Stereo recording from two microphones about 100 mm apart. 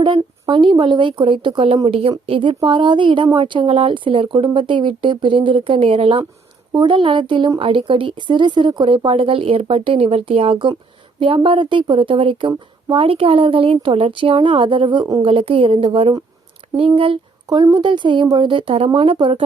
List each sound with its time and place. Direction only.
0.0 s a woman's voice: 55° right (ahead or behind)
6.7 s a woman's voice: 55° right (ahead or behind)
9.0 s a woman's voice: 65° right (ahead or behind)
17.5 s a woman's voice: 45° right (ahead or behind); by 19.4 s 60° right (ahead or behind)